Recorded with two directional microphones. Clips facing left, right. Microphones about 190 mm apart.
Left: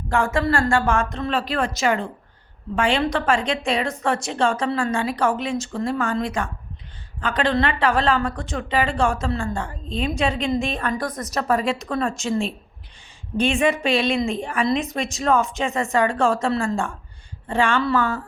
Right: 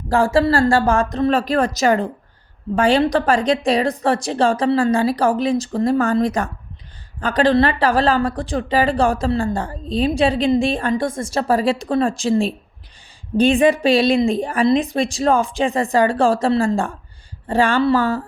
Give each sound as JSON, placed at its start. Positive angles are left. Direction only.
{"t": 0.1, "sound": "speech", "side_deg": -35}